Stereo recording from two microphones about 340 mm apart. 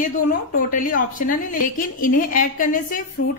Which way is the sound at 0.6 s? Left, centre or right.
Left.